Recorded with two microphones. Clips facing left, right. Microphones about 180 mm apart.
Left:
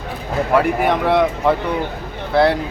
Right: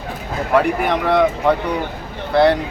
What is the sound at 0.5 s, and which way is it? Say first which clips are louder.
Speech: even; centre (ahead or behind).